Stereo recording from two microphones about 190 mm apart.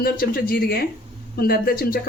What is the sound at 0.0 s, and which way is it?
A woman's voice, 50° left (ahead or behind).